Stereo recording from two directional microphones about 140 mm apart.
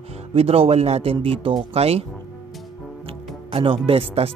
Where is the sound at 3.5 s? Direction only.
40° right (ahead or behind).